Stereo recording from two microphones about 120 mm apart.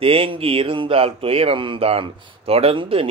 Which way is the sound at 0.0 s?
50° right (ahead or behind).